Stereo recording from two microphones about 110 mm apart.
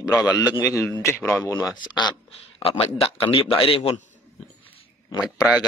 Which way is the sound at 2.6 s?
65° left (ahead or behind).